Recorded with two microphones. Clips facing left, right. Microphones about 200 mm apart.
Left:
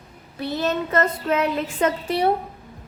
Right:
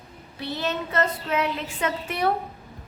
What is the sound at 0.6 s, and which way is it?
Speech, 50° left (ahead or behind).